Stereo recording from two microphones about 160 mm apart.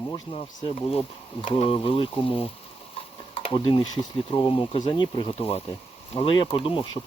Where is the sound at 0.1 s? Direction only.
35° left (ahead or behind).